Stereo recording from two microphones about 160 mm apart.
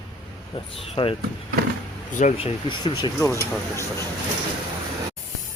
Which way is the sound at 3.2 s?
20° left (ahead or behind).